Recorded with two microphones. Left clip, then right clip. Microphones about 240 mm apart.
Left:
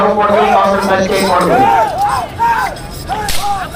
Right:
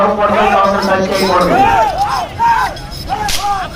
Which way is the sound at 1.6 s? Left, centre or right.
Centre.